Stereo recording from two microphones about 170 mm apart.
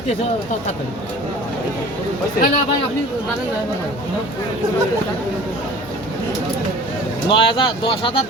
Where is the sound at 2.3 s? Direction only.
55° left (ahead or behind).